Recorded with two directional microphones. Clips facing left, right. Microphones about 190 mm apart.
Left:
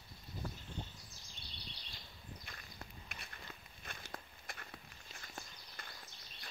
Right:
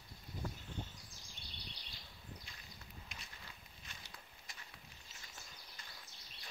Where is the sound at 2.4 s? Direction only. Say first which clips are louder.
Left 4 dB; 60° left (ahead or behind).